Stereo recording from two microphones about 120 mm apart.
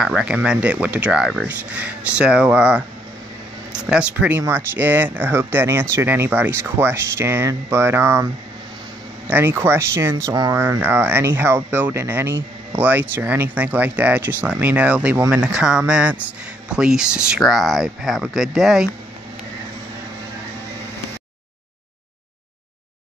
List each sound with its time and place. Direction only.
0.0 s speech: 5° right (ahead or behind)
9.3 s speech: 20° right (ahead or behind)
10.6 s speech: 20° right (ahead or behind); by 18.9 s 5° right (ahead or behind)